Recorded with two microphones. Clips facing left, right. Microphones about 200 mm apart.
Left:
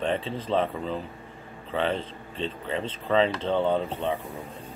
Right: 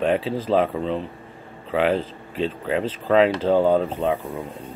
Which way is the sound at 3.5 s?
40° right (ahead or behind).